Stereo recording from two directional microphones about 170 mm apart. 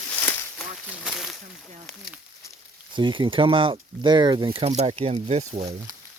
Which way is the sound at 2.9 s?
30° right (ahead or behind).